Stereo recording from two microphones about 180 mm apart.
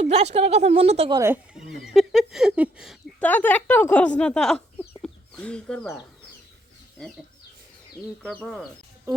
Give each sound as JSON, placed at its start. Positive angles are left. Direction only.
{"t": 0.0, "sound": "speech", "side_deg": -35}
{"t": 1.1, "sound": "speech", "side_deg": -15}
{"t": 1.5, "sound": "speech", "side_deg": 0}
{"t": 3.2, "sound": "speech", "side_deg": 10}
{"t": 8.2, "sound": "speech", "side_deg": 5}